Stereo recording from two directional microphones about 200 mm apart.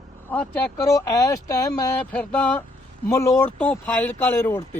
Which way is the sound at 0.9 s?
15° left (ahead or behind).